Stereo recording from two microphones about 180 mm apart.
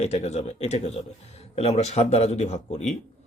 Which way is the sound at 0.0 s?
35° left (ahead or behind).